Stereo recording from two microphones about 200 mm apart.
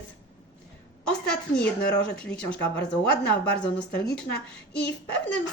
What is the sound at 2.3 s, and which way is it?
Speech, 5° left (ahead or behind).